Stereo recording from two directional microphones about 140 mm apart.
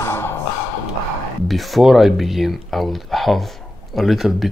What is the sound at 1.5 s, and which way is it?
Speech, centre (ahead or behind).